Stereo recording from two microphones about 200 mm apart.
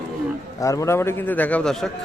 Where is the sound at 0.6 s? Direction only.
15° left (ahead or behind).